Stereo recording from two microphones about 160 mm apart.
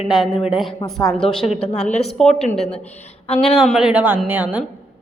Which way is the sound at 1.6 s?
45° left (ahead or behind).